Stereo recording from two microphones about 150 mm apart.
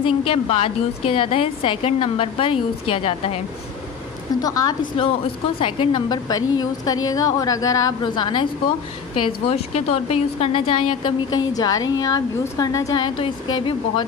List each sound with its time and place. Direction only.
0.0 s a woman's voice: 40° left (ahead or behind)
4.4 s a woman's voice: 25° left (ahead or behind)
9.5 s speech: 40° left (ahead or behind)
11.1 s a woman's voice: 25° left (ahead or behind)